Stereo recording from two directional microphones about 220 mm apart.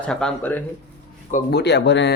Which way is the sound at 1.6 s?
50° left (ahead or behind).